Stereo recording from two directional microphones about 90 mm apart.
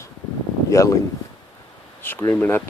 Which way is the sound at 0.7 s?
35° left (ahead or behind).